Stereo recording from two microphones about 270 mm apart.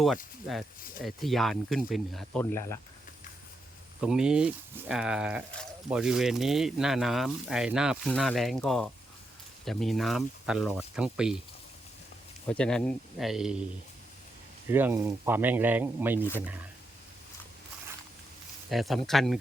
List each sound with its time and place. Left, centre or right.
1.0 s speech: centre
4.0 s speech: centre
12.5 s speech: centre
14.7 s speech: centre
18.7 s speech: centre